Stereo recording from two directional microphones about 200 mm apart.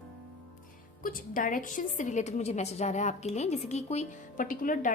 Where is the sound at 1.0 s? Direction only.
45° left (ahead or behind).